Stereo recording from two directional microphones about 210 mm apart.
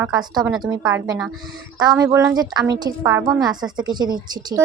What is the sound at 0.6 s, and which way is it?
Speech, 20° right (ahead or behind).